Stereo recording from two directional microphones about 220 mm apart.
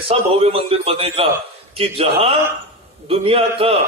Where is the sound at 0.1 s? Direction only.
25° right (ahead or behind).